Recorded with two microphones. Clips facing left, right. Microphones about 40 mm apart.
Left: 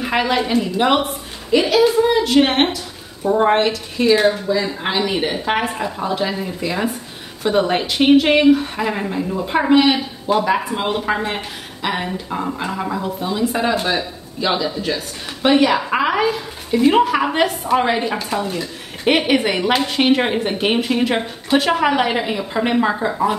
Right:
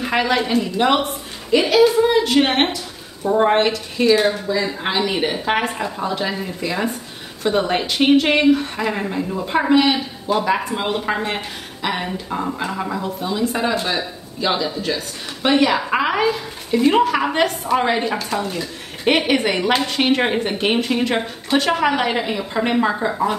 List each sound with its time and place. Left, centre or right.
0.0 s a woman's voice: centre
4.1 s speech: centre
4.5 s a woman's voice: centre